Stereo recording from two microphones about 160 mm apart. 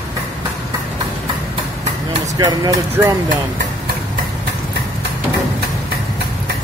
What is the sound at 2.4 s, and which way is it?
Speech, 25° right (ahead or behind).